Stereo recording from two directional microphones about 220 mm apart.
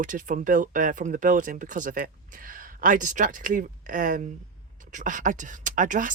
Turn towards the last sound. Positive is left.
turn(degrees=-35)  # may be behind; listen again after turning